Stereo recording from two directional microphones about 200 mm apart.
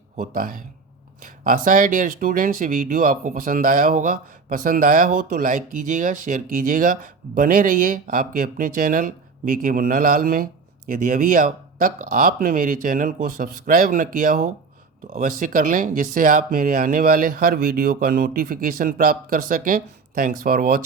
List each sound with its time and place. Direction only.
0.2 s speech: 45° right (ahead or behind)